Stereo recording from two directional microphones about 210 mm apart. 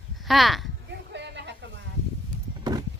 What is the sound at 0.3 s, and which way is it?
Speech, centre (ahead or behind).